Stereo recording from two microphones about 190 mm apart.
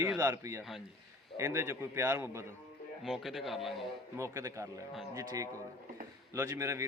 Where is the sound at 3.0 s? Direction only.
Centre (ahead or behind).